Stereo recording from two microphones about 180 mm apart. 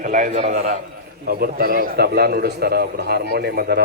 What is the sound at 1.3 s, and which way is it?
A man's voice, 55° right (ahead or behind).